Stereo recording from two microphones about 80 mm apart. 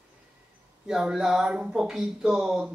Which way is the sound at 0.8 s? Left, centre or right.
Centre.